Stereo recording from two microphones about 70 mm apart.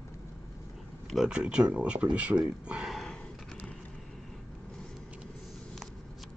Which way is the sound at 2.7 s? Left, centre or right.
Centre.